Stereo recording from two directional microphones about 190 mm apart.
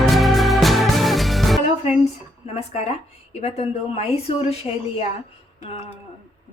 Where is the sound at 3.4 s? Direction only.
35° left (ahead or behind).